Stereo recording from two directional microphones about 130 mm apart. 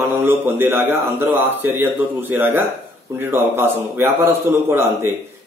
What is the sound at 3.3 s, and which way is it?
A man's voice, 20° right (ahead or behind).